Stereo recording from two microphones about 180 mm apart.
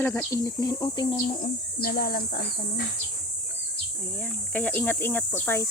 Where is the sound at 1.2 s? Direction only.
55° left (ahead or behind).